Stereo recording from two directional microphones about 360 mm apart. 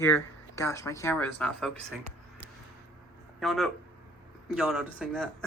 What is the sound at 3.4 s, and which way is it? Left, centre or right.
Speech, centre.